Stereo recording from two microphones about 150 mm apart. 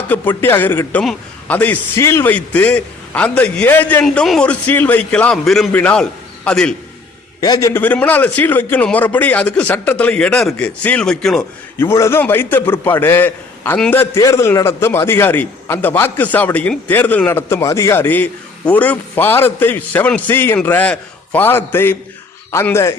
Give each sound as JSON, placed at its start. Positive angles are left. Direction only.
{"t": 0.1, "sound": "a man's voice", "side_deg": 15}
{"t": 7.4, "sound": "a man's voice", "side_deg": 25}
{"t": 7.7, "sound": "a man's voice", "side_deg": 10}
{"t": 11.8, "sound": "a man's voice", "side_deg": 15}